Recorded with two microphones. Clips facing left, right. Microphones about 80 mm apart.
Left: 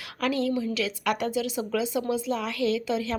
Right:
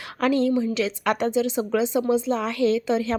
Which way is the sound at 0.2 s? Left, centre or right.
Right.